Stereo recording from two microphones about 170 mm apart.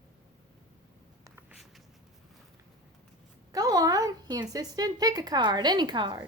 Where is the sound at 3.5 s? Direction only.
20° right (ahead or behind).